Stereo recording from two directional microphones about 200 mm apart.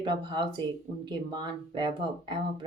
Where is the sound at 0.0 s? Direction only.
25° right (ahead or behind).